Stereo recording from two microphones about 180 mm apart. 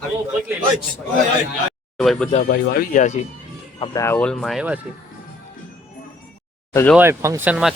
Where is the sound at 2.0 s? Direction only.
5° left (ahead or behind).